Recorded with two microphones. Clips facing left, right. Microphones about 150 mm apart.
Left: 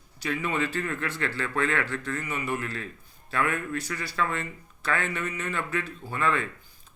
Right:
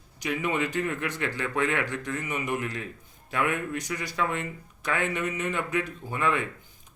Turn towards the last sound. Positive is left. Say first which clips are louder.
# even
turn(degrees=-15)  # may be behind; listen again after turning